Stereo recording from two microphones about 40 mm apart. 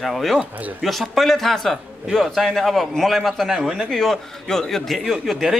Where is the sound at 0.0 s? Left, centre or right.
Centre.